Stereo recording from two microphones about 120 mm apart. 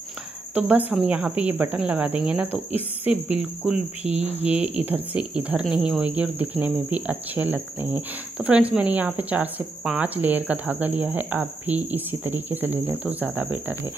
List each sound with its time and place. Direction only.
0.6 s cricket: 10° right (ahead or behind)
4.0 s cricket: 70° right (ahead or behind)
4.7 s cricket: 15° right (ahead or behind)